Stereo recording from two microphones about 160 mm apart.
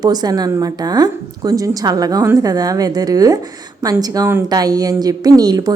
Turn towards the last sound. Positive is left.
turn(degrees=-25)  # may be behind; listen again after turning